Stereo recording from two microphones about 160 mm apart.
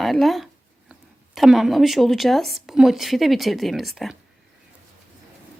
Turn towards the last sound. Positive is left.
turn(degrees=0)  # may be behind; listen again after turning